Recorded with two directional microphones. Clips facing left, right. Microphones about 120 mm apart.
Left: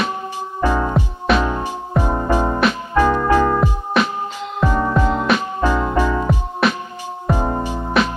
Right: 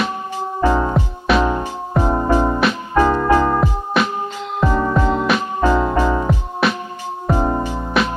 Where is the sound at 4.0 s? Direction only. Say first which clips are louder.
Even; centre (ahead or behind).